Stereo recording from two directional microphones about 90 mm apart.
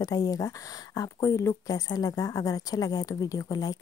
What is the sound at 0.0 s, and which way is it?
Speech, 45° left (ahead or behind).